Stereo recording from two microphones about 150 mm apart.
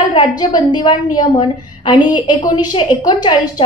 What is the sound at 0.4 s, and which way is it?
A woman's voice, 30° left (ahead or behind).